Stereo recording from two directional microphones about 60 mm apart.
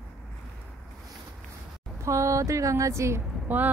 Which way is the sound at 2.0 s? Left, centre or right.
Right.